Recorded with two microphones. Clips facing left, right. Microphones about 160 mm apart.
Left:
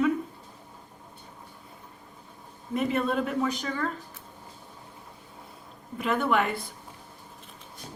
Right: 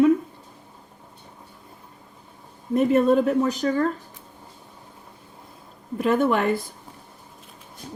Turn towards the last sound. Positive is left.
turn(degrees=-45)  # may be behind; listen again after turning